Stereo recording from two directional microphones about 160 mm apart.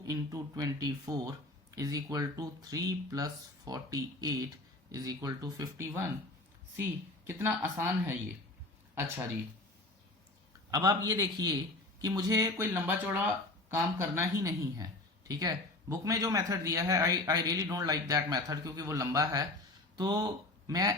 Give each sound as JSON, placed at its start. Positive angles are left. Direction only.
{"t": 0.0, "sound": "speech", "side_deg": -20}
{"t": 7.3, "sound": "speech", "side_deg": -15}
{"t": 10.7, "sound": "speech", "side_deg": -25}